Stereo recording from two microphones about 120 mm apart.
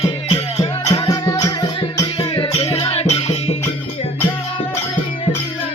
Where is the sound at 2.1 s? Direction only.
45° left (ahead or behind).